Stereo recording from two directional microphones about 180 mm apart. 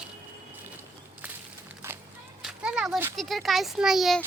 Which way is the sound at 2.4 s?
5° right (ahead or behind).